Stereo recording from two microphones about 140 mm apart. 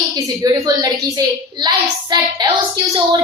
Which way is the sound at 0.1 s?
25° right (ahead or behind).